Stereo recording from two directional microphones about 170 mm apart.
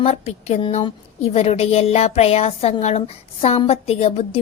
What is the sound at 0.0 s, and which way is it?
A woman's voice, 40° left (ahead or behind).